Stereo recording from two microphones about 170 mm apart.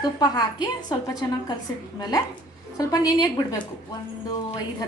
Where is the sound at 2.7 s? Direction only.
20° left (ahead or behind).